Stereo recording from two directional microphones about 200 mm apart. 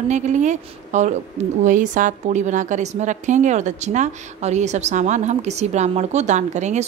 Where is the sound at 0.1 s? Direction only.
35° right (ahead or behind).